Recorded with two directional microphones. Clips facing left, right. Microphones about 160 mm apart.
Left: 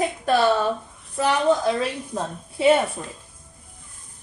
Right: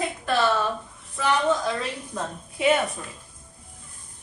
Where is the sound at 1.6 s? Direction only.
30° left (ahead or behind).